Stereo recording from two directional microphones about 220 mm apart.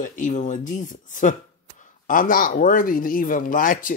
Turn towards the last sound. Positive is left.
turn(degrees=40)  # may be behind; listen again after turning